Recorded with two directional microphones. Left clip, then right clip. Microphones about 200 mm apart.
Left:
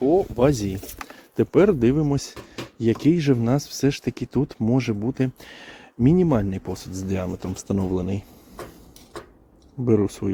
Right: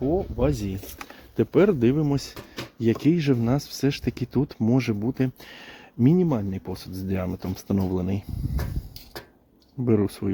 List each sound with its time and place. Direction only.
0.1 s speech: 45° left (ahead or behind)
0.5 s speech: 25° left (ahead or behind)
1.4 s speech: centre (ahead or behind)
6.1 s speech: 15° left (ahead or behind)
6.5 s speech: centre (ahead or behind)
9.8 s speech: 5° right (ahead or behind)